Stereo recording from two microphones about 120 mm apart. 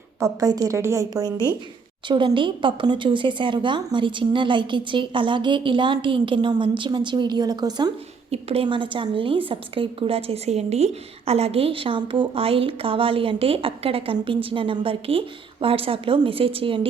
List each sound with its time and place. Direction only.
0.2 s a woman's voice: 30° right (ahead or behind)
2.0 s speech: 45° right (ahead or behind)
8.3 s a woman's voice: 60° right (ahead or behind)
8.6 s speech: 45° right (ahead or behind)